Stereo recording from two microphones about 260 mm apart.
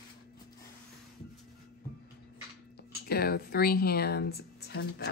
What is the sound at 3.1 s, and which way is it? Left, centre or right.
Speech, left.